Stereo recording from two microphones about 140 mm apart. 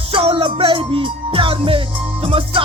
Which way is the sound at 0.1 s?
40° right (ahead or behind).